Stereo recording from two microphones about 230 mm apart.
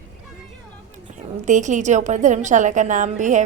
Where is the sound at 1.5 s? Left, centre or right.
Right.